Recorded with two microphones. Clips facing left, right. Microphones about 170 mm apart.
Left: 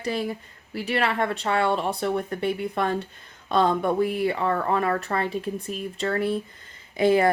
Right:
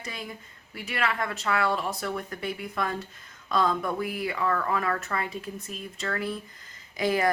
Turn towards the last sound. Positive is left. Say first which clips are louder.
# left 6 dB
turn(degrees=25)  # may be behind; listen again after turning